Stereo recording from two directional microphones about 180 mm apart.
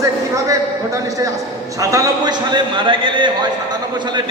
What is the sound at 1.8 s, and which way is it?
A man's voice, 20° right (ahead or behind).